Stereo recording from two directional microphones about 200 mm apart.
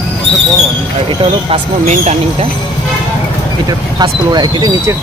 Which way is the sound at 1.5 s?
30° right (ahead or behind).